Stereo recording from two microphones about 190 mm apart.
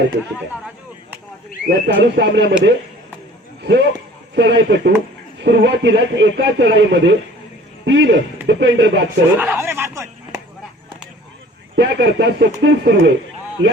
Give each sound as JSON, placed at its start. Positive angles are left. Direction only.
{"t": 1.6, "sound": "a man's voice", "side_deg": -55}
{"t": 9.4, "sound": "a sound", "side_deg": -10}
{"t": 11.8, "sound": "a man's voice", "side_deg": -65}